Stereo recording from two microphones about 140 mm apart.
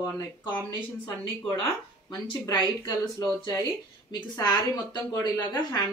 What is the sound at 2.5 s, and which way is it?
Speech, 30° left (ahead or behind).